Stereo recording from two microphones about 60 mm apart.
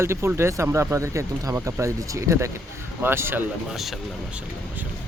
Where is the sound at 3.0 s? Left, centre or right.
Right.